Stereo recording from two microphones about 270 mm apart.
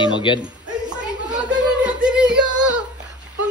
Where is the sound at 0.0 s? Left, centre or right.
Centre.